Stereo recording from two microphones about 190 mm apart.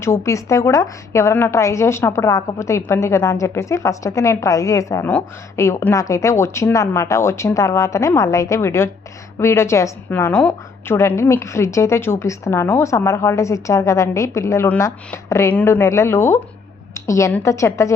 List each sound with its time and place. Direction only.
0.0 s a woman's voice: 15° left (ahead or behind)